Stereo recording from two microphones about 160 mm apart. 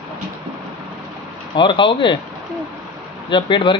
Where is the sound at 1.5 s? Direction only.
30° left (ahead or behind).